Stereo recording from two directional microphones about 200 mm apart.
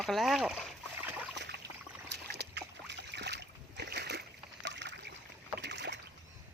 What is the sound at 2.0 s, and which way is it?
Boat, 55° right (ahead or behind).